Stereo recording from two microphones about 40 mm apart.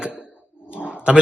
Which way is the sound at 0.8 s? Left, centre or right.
Right.